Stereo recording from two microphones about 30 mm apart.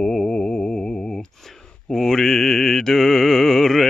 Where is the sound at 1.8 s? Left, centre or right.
Centre.